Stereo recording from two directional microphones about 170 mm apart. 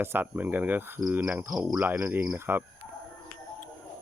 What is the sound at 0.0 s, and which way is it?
Cricket, 10° right (ahead or behind).